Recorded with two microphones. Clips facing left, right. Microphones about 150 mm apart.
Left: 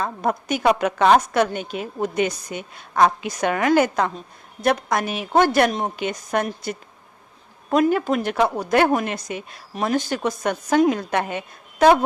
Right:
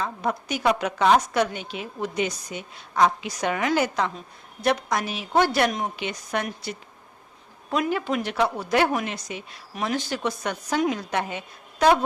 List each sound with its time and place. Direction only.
0.0 s a woman's voice: 50° left (ahead or behind)